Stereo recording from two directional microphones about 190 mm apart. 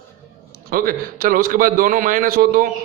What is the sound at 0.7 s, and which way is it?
A man's voice, 50° right (ahead or behind).